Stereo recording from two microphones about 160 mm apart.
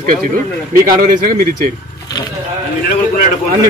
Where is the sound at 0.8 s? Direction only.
60° right (ahead or behind).